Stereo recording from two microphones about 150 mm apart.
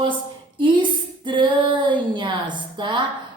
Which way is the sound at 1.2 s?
30° right (ahead or behind).